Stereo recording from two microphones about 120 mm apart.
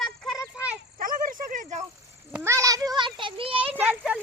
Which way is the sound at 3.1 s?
45° right (ahead or behind).